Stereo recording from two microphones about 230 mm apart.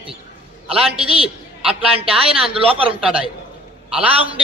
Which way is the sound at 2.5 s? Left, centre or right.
Right.